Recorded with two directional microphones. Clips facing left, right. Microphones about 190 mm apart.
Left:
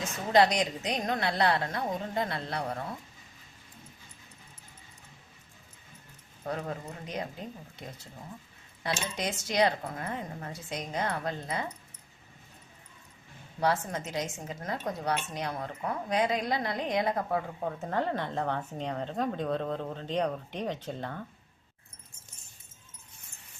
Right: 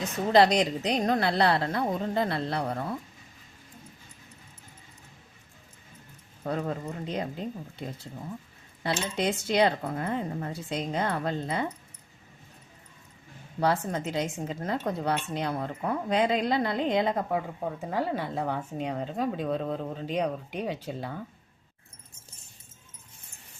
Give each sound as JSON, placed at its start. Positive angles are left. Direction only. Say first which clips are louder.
{"t": 0.3, "sound": "speech", "louder": "right 3 dB", "side_deg": -30}
{"t": 7.0, "sound": "speech", "louder": "right 5 dB", "side_deg": -30}
{"t": 13.6, "sound": "a woman's voice", "louder": "right 2 dB", "side_deg": -30}
{"t": 17.7, "sound": "speech", "louder": "right 1 dB", "side_deg": -10}